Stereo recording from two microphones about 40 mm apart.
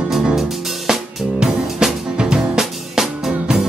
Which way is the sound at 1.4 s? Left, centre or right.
Centre.